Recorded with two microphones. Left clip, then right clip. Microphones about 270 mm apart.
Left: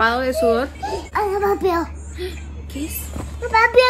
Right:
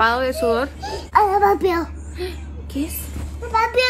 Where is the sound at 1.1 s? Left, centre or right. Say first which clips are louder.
Right 5 dB; centre.